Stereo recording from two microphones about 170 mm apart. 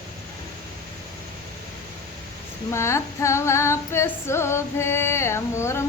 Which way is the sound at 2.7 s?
15° left (ahead or behind).